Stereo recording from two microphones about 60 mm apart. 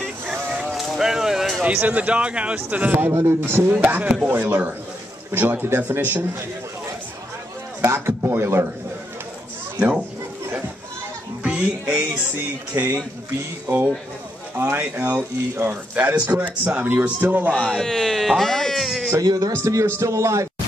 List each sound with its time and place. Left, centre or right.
0.7 s a sound: centre
1.6 s a man's voice: right
3.1 s speech: right
3.7 s a man's voice: right
7.8 s speech: right
9.8 s speech: right
11.4 s music: centre
12.7 s a man's voice: right
13.7 s a man's voice: right
17.6 s speech: centre
19.2 s a man's voice: right
19.5 s a man's voice: right